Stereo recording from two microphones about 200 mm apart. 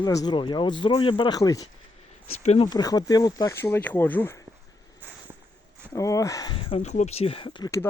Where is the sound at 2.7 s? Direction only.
20° left (ahead or behind).